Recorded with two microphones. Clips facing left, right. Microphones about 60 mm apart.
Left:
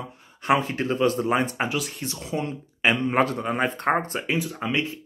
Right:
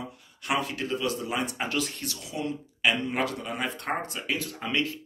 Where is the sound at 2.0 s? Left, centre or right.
Left.